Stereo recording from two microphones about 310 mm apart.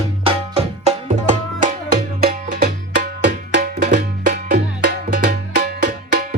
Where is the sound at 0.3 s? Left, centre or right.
Centre.